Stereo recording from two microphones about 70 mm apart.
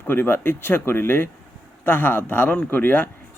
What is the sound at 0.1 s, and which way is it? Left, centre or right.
Speech, left.